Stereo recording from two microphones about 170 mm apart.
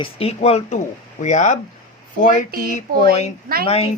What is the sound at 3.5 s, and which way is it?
Speech, 60° right (ahead or behind).